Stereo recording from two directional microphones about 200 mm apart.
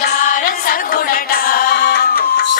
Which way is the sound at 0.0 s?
45° left (ahead or behind).